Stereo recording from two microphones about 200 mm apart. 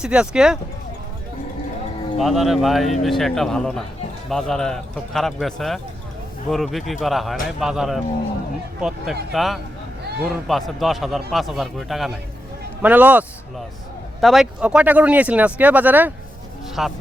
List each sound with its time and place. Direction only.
0.0 s a man's voice: 5° right (ahead or behind)
2.1 s a man's voice: centre (ahead or behind)
9.3 s a man's voice: centre (ahead or behind)